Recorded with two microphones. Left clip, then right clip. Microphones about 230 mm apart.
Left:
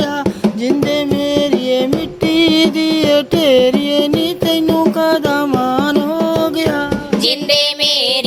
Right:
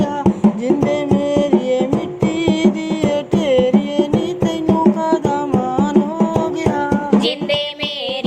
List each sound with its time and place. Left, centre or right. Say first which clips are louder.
1.3 s music: left 2 dB; left
5.0 s music: left 3 dB; left
7.2 s music: left 4 dB; left